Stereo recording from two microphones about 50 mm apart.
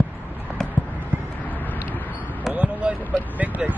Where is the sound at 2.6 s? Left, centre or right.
Right.